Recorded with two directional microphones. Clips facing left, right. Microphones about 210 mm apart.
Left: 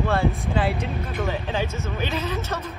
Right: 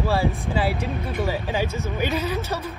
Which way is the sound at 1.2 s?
15° right (ahead or behind).